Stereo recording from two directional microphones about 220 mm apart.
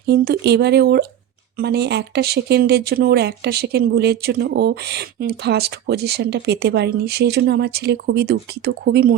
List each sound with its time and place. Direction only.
0.0 s speech: 45° right (ahead or behind)